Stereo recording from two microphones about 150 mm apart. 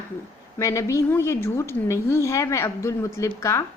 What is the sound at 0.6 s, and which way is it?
A woman's voice, 20° left (ahead or behind).